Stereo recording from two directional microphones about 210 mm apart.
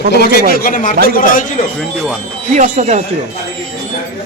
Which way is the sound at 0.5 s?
40° left (ahead or behind).